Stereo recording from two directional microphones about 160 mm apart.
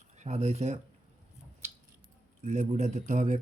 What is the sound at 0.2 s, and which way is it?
Speech, 45° right (ahead or behind).